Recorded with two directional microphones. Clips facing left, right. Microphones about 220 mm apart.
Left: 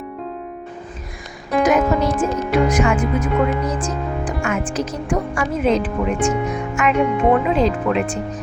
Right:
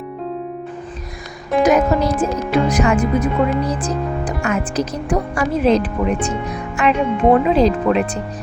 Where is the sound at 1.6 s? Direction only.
35° right (ahead or behind).